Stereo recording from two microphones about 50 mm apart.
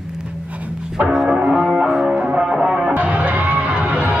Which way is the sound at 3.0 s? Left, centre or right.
Right.